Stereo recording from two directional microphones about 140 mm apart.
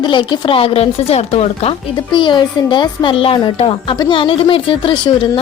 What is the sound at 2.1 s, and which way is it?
Speech, 35° left (ahead or behind).